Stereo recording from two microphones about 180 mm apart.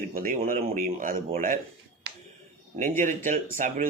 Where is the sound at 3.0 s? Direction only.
45° right (ahead or behind).